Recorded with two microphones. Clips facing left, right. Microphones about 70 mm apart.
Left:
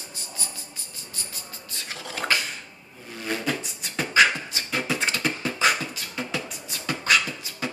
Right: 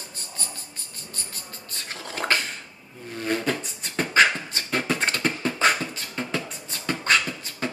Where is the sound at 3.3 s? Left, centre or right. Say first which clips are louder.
Right 1 dB; right.